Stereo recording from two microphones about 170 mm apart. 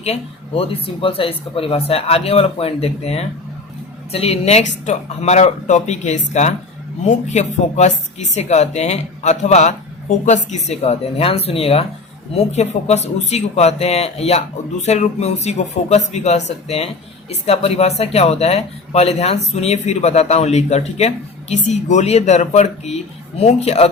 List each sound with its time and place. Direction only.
0.0 s speech: 35° left (ahead or behind)